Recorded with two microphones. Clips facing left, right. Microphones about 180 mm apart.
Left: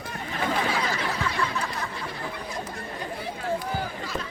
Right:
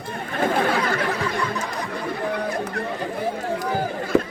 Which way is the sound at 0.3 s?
50° right (ahead or behind).